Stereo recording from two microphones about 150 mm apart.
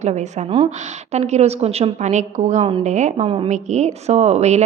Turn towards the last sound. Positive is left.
turn(degrees=-45)  # may be behind; listen again after turning